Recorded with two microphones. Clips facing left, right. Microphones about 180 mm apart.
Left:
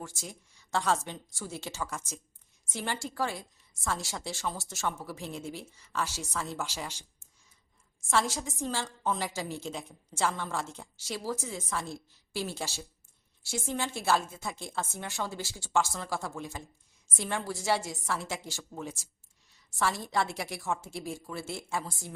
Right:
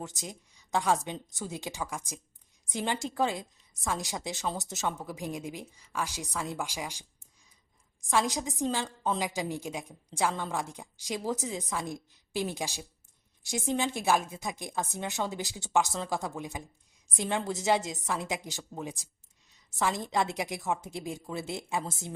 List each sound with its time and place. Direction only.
0.0 s a woman's voice: 20° right (ahead or behind)
8.0 s a woman's voice: 15° right (ahead or behind)